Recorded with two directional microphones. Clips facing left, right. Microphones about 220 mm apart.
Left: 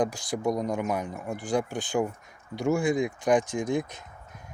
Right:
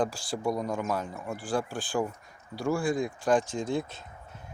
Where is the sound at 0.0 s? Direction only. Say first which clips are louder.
Left 2 dB; 20° left (ahead or behind).